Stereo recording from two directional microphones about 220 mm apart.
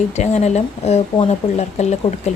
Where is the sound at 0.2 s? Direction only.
30° left (ahead or behind).